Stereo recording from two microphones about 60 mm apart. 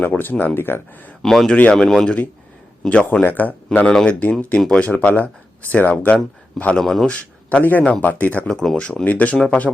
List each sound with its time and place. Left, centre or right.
0.0 s speech: left
1.2 s speech: centre
2.9 s speech: left
3.8 s speech: centre
6.7 s speech: centre
7.6 s speech: left
8.4 s speech: centre
9.0 s speech: left